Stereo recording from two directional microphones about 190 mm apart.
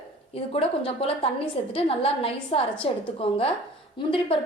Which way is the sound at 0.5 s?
30° left (ahead or behind).